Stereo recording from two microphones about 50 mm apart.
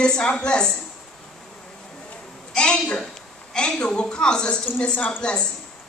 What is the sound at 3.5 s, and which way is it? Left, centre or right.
A woman's voice, centre.